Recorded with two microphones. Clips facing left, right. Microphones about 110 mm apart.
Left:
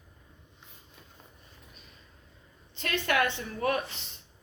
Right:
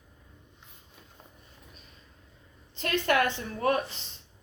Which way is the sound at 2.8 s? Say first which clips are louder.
Right 2 dB; 40° right (ahead or behind).